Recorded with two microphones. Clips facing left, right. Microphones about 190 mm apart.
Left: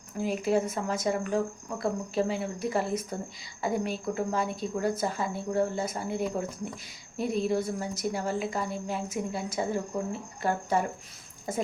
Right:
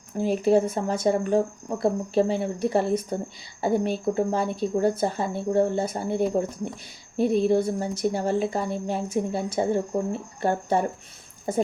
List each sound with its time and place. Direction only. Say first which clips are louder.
0.2 s a woman's voice: right 6 dB; 30° right (ahead or behind)
7.4 s a woman's voice: right 6 dB; 30° right (ahead or behind)